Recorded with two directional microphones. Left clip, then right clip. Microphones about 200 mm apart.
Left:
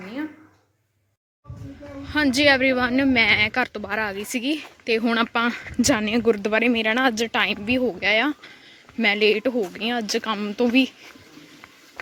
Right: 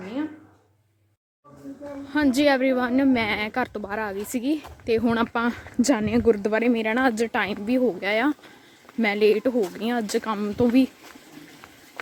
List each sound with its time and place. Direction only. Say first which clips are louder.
2.0 s speech: left 2 dB; 5° right (ahead or behind)